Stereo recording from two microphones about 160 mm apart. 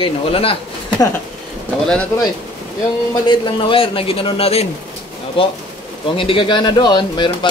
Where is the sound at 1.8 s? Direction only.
5° left (ahead or behind).